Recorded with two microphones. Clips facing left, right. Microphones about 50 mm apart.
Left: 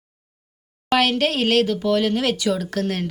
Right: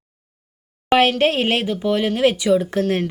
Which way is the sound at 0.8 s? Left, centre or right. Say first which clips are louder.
Right 4 dB; right.